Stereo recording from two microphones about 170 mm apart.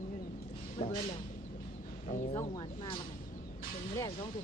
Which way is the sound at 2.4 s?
30° left (ahead or behind).